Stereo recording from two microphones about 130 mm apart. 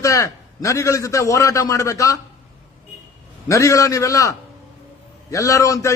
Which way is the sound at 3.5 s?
25° left (ahead or behind).